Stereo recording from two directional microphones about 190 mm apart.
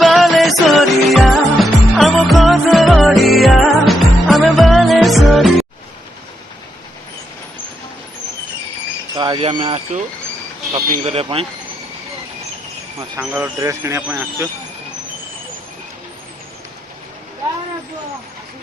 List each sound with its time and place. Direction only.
0.0 s music: centre (ahead or behind)
9.1 s speech: 20° right (ahead or behind)
11.0 s speech: 30° right (ahead or behind)
13.1 s speech: 10° right (ahead or behind)